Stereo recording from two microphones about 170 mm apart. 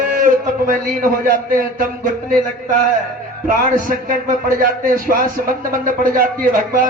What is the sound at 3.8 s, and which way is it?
Speech, 55° right (ahead or behind).